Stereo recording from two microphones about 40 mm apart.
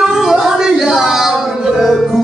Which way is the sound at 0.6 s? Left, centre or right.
Centre.